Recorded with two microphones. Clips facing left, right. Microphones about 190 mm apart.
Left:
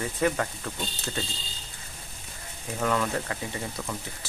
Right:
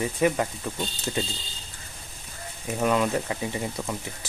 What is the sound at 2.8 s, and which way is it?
Speech, 20° right (ahead or behind).